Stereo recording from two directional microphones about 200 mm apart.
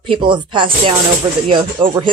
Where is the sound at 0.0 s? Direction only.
25° right (ahead or behind).